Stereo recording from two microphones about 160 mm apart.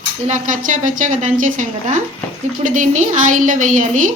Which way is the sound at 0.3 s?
55° right (ahead or behind).